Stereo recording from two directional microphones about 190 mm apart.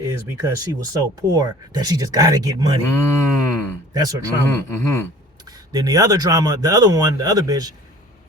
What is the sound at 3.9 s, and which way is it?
Speech, 20° right (ahead or behind).